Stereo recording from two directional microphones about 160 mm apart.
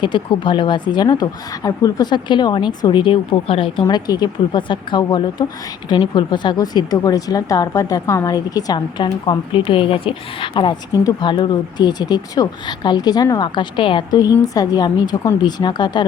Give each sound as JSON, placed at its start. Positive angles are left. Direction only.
{"t": 0.0, "sound": "a woman's voice", "side_deg": 30}